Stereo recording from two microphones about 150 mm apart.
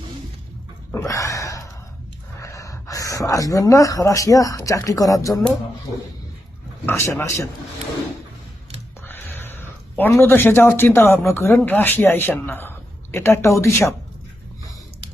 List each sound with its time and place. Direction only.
0.9 s a sound: 20° left (ahead or behind)
2.4 s speech: 20° left (ahead or behind)
6.8 s speech: 20° left (ahead or behind)
9.0 s speech: 15° left (ahead or behind)